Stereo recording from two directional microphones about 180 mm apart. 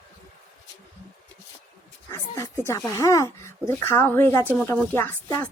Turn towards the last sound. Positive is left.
turn(degrees=15)  # may be behind; listen again after turning